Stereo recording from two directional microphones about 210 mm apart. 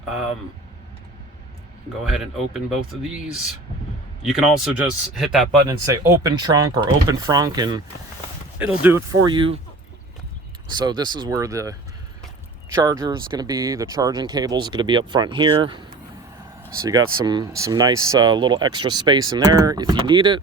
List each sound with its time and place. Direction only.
2.0 s speech: centre (ahead or behind)
4.2 s speech: centre (ahead or behind)
5.6 s speech: 15° right (ahead or behind)
10.7 s speech: 20° right (ahead or behind)
17.0 s speech: 90° right
17.2 s speech: 20° right (ahead or behind)